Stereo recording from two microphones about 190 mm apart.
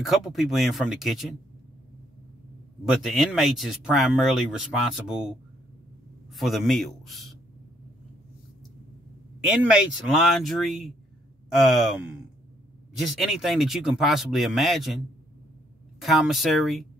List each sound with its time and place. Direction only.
0.0 s speech: centre (ahead or behind)
2.8 s speech: centre (ahead or behind)
6.3 s speech: centre (ahead or behind)
9.6 s speech: 5° right (ahead or behind)
13.0 s speech: centre (ahead or behind)
16.0 s speech: centre (ahead or behind)